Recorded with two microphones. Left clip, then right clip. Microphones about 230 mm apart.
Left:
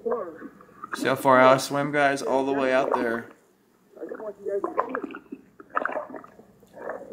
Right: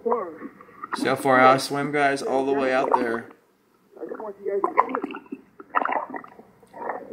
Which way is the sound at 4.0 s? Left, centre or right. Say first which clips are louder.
Right 2 dB; right.